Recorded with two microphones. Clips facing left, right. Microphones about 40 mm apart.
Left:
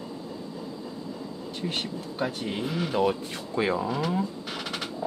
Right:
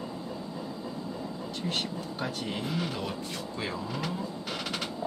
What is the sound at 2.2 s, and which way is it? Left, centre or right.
Speech, centre.